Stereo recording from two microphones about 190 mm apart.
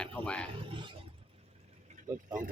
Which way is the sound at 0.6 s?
25° right (ahead or behind).